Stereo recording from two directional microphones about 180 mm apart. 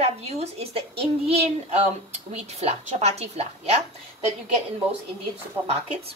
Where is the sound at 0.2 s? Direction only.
35° right (ahead or behind).